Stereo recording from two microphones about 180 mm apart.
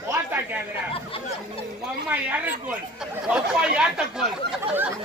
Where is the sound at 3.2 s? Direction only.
5° right (ahead or behind).